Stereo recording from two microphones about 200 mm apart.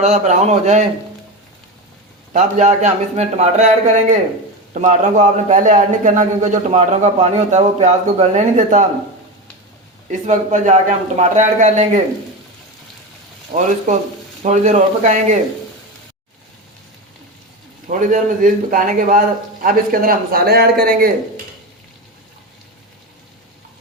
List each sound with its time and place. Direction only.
0.0 s a man's voice: 35° right (ahead or behind)
2.3 s a man's voice: 35° right (ahead or behind)
10.1 s a man's voice: 40° right (ahead or behind)
13.5 s a man's voice: 40° right (ahead or behind)
17.8 s a man's voice: 40° right (ahead or behind)